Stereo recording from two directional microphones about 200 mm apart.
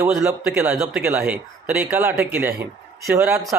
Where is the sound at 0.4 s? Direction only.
5° right (ahead or behind).